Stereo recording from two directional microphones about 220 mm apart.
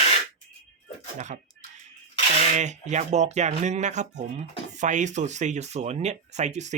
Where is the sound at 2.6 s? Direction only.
30° right (ahead or behind).